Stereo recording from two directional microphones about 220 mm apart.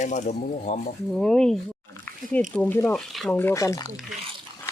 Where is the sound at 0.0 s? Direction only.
35° left (ahead or behind).